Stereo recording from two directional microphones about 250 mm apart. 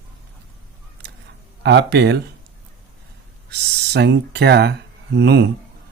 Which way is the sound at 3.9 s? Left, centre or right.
Right.